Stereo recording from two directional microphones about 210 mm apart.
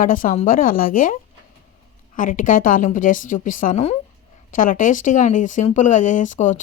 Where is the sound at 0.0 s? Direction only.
40° left (ahead or behind).